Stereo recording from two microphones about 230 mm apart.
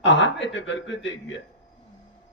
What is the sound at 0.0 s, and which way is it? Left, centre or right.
A man's voice, left.